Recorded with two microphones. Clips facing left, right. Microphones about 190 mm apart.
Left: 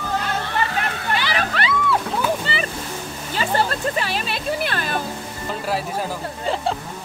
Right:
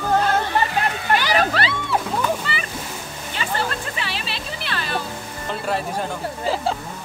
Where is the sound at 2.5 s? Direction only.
25° left (ahead or behind).